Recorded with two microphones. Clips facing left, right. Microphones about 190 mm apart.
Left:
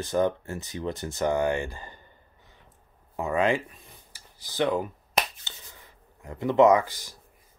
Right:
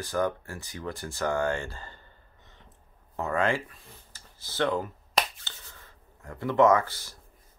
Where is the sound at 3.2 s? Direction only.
15° left (ahead or behind).